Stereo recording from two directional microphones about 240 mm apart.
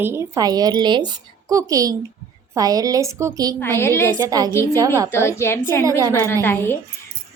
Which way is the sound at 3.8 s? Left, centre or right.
Centre.